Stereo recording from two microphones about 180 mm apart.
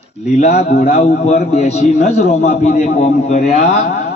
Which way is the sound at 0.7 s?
60° left (ahead or behind).